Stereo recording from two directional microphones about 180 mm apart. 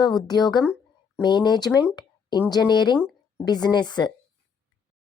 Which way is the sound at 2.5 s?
25° left (ahead or behind).